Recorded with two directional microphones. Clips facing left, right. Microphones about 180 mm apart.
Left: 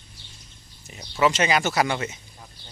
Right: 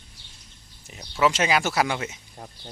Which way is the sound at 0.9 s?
Centre (ahead or behind).